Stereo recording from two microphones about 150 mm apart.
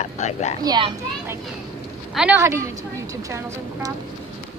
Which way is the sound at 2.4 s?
20° right (ahead or behind).